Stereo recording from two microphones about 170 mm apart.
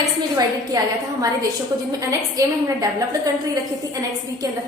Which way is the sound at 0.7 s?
20° right (ahead or behind).